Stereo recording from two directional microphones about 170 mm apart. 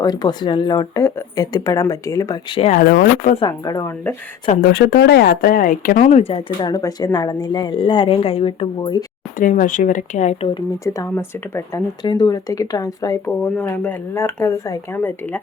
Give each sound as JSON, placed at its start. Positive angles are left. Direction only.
{"t": 0.0, "sound": "speech", "side_deg": 25}
{"t": 2.6, "sound": "speech", "side_deg": 40}
{"t": 2.9, "sound": "speech", "side_deg": 60}
{"t": 3.4, "sound": "speech", "side_deg": 20}
{"t": 4.4, "sound": "speech", "side_deg": 55}
{"t": 8.8, "sound": "speech", "side_deg": 20}
{"t": 9.4, "sound": "speech", "side_deg": 50}
{"t": 10.5, "sound": "speech", "side_deg": 20}
{"t": 12.0, "sound": "speech", "side_deg": 25}